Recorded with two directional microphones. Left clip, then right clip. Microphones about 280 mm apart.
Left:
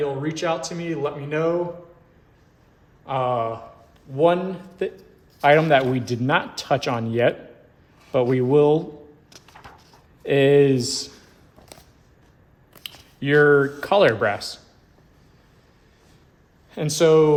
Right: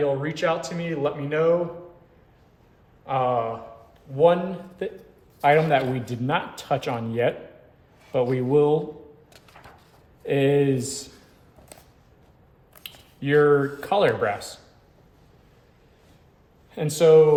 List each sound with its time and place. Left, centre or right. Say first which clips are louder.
0.0 s speech: right 1 dB; centre
3.1 s speech: even; left
10.2 s speech: left 5 dB; left
12.7 s speech: left 4 dB; left
16.7 s speech: right 1 dB; left